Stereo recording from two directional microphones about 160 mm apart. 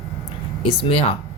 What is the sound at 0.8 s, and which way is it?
Speech, 35° left (ahead or behind).